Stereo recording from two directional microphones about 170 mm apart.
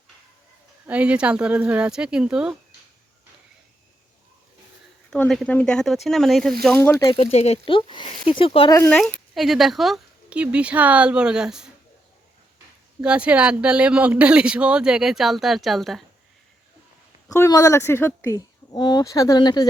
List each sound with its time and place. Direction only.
0.9 s speech: 5° right (ahead or behind)
5.1 s speech: 5° left (ahead or behind)
7.0 s speech: 30° left (ahead or behind)
8.9 s speech: 5° left (ahead or behind)
13.0 s speech: 5° right (ahead or behind)
17.2 s a woman's voice: 20° left (ahead or behind)